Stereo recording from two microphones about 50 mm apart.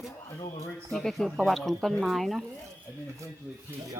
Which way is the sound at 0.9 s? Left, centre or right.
Centre.